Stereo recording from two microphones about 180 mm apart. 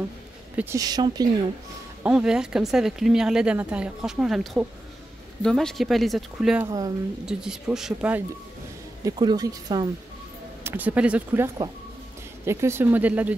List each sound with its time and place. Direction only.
0.6 s a woman's voice: 15° right (ahead or behind)
2.0 s speech: 5° right (ahead or behind)
9.0 s a woman's voice: 20° right (ahead or behind)